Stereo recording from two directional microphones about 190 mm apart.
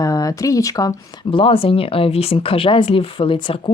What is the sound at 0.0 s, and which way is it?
Speech, 20° left (ahead or behind).